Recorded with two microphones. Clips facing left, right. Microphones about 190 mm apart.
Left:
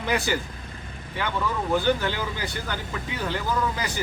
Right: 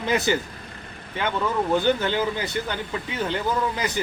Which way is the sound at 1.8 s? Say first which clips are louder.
Right 3 dB; 20° right (ahead or behind).